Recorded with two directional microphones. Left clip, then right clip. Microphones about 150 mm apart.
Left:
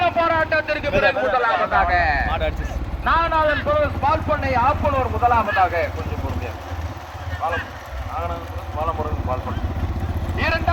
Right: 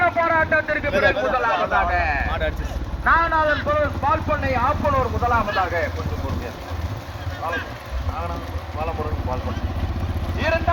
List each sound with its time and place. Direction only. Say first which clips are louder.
0.0 s vehicle: even; 20° left (ahead or behind)
0.9 s a man's voice: left 1 dB; centre (ahead or behind)
1.2 s speech: left 2 dB; 10° left (ahead or behind)
1.5 s a sound: left 2 dB; centre (ahead or behind)
1.9 s a sound: left 3 dB; 10° left (ahead or behind)
2.2 s a sound: left 2 dB; centre (ahead or behind)
3.0 s a man's voice: even; 10° left (ahead or behind)
7.4 s speech: left 3 dB; 5° left (ahead or behind)
10.3 s vehicle: even; centre (ahead or behind)